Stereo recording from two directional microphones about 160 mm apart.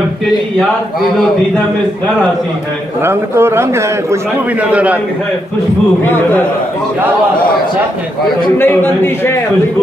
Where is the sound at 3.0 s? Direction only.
15° right (ahead or behind).